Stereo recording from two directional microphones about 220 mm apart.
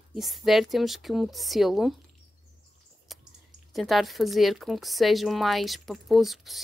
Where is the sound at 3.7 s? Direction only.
Centre (ahead or behind).